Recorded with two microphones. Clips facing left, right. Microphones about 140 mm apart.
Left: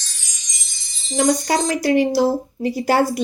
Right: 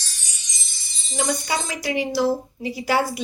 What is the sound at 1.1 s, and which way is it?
Speech, 45° left (ahead or behind).